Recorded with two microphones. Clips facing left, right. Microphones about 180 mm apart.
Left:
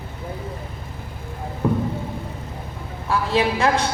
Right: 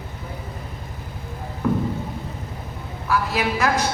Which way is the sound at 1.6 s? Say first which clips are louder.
Even; 30° left (ahead or behind).